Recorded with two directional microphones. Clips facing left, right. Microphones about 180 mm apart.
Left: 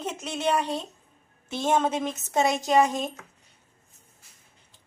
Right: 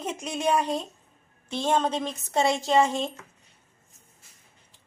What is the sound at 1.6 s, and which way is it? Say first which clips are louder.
A woman's voice: left 1 dB; 10° left (ahead or behind).